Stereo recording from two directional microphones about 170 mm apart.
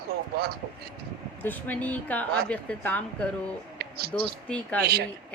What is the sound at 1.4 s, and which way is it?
A woman's voice, 10° left (ahead or behind).